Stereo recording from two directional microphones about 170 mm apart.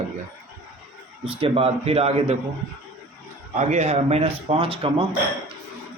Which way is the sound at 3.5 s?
40° right (ahead or behind).